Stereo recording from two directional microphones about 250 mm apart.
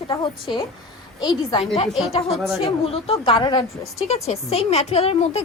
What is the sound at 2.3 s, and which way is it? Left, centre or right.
Speech, centre.